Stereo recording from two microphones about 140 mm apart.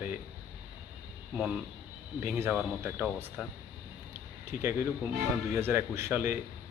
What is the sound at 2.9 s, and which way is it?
Speech, centre (ahead or behind).